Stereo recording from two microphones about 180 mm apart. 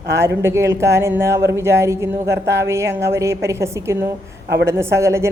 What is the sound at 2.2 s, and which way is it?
Speech, 70° right (ahead or behind).